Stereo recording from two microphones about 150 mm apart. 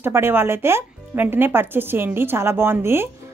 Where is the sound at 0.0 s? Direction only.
15° right (ahead or behind).